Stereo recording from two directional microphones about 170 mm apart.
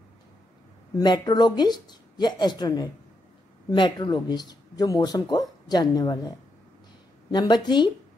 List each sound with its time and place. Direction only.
0.9 s speech: 25° left (ahead or behind)